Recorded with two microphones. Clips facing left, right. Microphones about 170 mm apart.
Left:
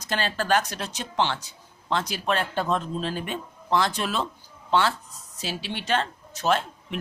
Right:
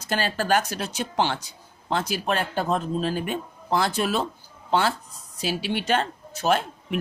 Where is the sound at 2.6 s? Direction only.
45° right (ahead or behind).